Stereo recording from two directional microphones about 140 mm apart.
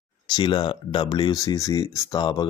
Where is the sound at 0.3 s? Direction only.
35° left (ahead or behind).